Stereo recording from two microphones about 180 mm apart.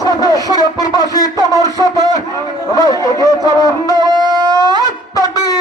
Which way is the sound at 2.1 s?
20° left (ahead or behind).